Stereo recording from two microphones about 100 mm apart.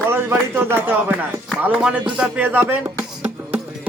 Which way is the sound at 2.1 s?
15° right (ahead or behind).